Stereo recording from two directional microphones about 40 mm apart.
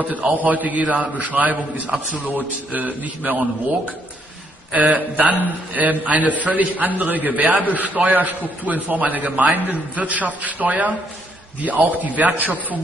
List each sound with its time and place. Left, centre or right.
0.0 s a man's voice: right
4.7 s a man's voice: right